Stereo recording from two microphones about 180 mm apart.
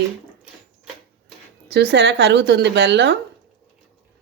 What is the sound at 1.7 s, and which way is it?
Speech, 70° right (ahead or behind).